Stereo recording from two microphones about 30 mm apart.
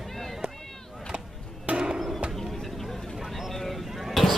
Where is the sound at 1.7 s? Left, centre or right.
Right.